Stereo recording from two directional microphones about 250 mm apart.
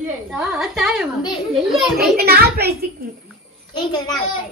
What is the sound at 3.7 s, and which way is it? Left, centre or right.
Speech, centre.